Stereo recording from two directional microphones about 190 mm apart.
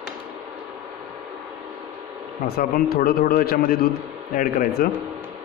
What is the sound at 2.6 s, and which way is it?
Speech, 50° left (ahead or behind).